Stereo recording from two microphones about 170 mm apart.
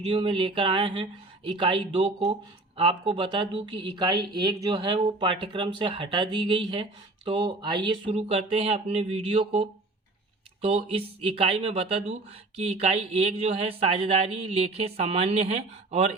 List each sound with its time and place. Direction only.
0.0 s speech: 30° right (ahead or behind)